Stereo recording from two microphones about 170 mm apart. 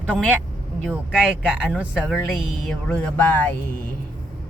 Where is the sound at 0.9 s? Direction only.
5° right (ahead or behind); by 3.4 s 10° left (ahead or behind).